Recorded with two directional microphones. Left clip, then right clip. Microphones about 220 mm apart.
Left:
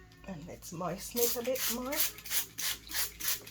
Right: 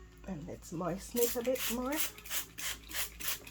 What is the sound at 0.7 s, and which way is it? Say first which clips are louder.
Speech: even; 50° right (ahead or behind).